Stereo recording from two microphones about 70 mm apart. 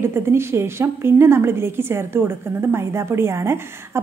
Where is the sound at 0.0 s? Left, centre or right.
Right.